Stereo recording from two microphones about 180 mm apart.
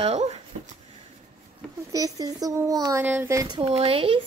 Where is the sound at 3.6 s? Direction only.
35° right (ahead or behind).